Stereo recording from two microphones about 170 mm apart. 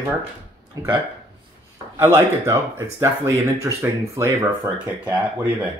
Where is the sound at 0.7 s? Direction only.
20° right (ahead or behind).